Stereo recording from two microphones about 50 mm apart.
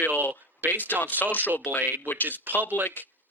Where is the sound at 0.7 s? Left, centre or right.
Left.